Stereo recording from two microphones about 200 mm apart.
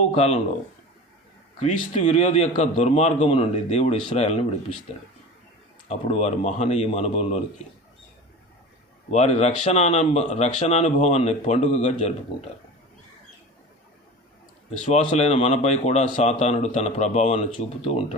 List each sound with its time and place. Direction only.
0.1 s speech: 35° left (ahead or behind)
1.5 s speech: 35° left (ahead or behind)
5.9 s speech: 35° left (ahead or behind)
9.0 s speech: 35° left (ahead or behind)
14.8 s speech: 35° left (ahead or behind)